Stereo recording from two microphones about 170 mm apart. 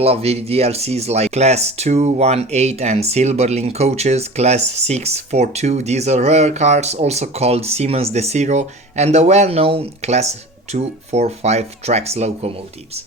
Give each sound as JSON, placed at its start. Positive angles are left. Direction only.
{"t": 0.0, "sound": "speech", "side_deg": -35}